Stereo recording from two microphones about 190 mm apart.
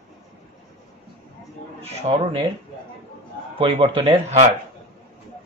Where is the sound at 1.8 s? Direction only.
30° right (ahead or behind).